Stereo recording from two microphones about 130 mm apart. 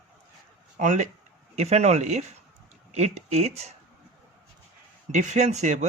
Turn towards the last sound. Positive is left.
turn(degrees=-60)  # may be behind; listen again after turning